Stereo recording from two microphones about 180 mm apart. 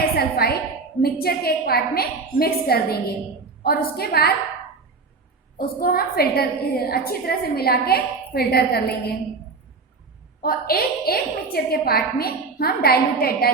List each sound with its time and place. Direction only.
0.0 s a sound: 55° left (ahead or behind)
1.0 s a woman's voice: 60° left (ahead or behind)
5.5 s a woman's voice: 55° left (ahead or behind)
10.4 s a woman's voice: 60° left (ahead or behind)